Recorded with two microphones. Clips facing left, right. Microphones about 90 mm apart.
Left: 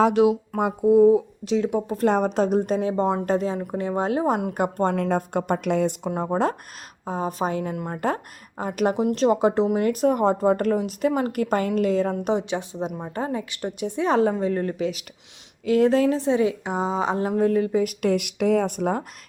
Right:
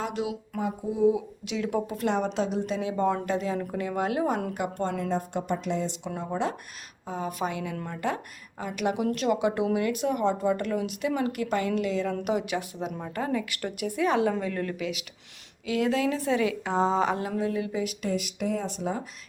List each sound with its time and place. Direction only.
0.0 s a woman's voice: 65° left (ahead or behind)
1.0 s a woman's voice: 35° left (ahead or behind)
3.2 s a woman's voice: 40° left (ahead or behind)
3.7 s a woman's voice: 30° left (ahead or behind)
4.5 s a woman's voice: 50° left (ahead or behind)
6.1 s a woman's voice: 45° left (ahead or behind)
12.2 s a woman's voice: 25° left (ahead or behind)
16.7 s speech: 10° left (ahead or behind)
17.2 s a woman's voice: 40° left (ahead or behind)
18.0 s a woman's voice: 65° left (ahead or behind)